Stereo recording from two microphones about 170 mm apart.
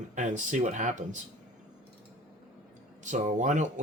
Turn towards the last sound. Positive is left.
turn(degrees=-45)  # may be behind; listen again after turning